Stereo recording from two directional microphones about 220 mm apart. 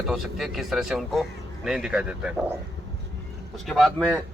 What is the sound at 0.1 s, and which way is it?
Speech, centre (ahead or behind).